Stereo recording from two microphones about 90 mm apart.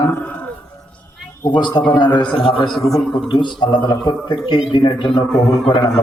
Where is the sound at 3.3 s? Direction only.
60° left (ahead or behind).